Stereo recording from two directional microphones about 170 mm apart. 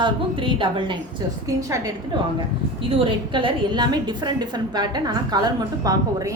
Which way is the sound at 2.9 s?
30° right (ahead or behind).